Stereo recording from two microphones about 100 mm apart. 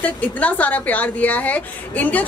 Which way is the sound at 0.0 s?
15° left (ahead or behind).